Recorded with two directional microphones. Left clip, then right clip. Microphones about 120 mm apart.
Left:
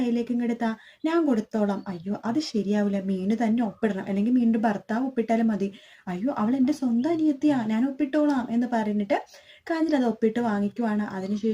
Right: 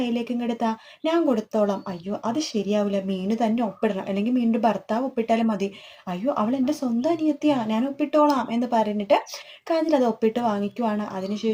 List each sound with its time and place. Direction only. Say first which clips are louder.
0.0 s a woman's voice: even; 20° right (ahead or behind)